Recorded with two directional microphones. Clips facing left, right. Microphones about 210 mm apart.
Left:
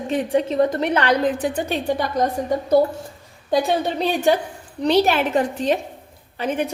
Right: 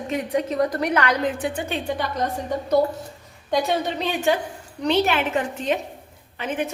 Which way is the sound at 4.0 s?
35° left (ahead or behind).